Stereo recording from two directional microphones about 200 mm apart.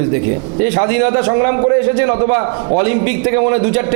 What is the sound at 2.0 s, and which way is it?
Speech, 25° right (ahead or behind).